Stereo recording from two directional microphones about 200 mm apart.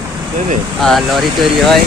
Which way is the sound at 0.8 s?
Centre (ahead or behind).